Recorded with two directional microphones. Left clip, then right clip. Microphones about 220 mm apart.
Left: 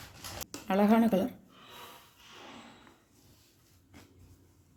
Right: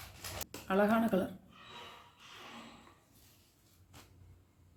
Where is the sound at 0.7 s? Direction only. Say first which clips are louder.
Left 4 dB; 30° left (ahead or behind).